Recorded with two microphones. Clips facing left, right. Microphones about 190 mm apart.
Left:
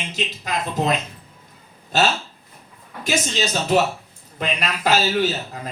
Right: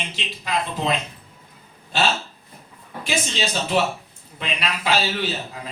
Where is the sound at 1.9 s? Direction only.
40° left (ahead or behind).